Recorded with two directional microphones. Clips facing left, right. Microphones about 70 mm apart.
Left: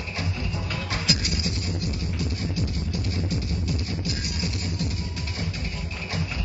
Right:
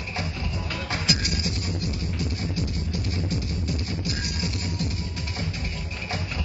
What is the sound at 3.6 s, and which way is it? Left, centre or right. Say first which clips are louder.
Music: even; right.